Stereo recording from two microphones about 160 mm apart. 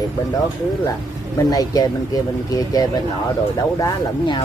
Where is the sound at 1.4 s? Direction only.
25° left (ahead or behind).